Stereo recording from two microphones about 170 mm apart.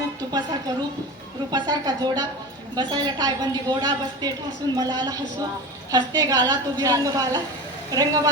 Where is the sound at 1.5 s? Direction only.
25° right (ahead or behind).